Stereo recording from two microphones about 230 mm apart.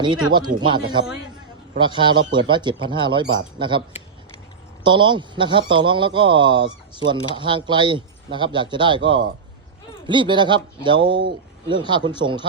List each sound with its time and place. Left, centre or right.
0.3 s a man's voice: centre
10.1 s a man's voice: right